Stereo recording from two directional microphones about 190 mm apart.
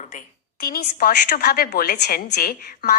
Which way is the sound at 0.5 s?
50° left (ahead or behind).